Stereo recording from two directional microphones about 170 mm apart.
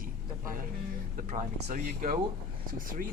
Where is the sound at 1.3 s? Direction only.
45° right (ahead or behind).